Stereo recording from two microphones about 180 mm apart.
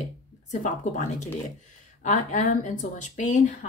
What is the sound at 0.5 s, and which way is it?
Speech, 45° left (ahead or behind).